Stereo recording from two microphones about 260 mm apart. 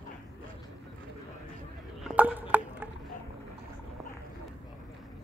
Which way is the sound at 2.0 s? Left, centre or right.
Centre.